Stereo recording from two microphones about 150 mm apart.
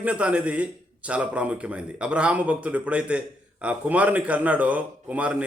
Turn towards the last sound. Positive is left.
turn(degrees=-10)  # may be behind; listen again after turning